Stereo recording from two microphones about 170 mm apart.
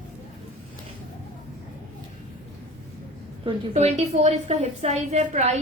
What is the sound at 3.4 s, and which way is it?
A woman's voice, 35° right (ahead or behind).